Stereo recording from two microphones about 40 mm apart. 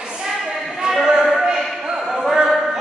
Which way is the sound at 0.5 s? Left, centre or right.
Centre.